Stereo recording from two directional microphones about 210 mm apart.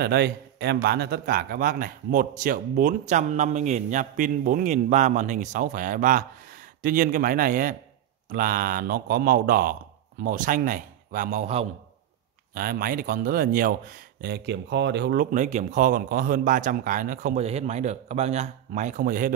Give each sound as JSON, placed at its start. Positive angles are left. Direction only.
{"t": 0.0, "sound": "a man's voice", "side_deg": -50}
{"t": 12.5, "sound": "a man's voice", "side_deg": -45}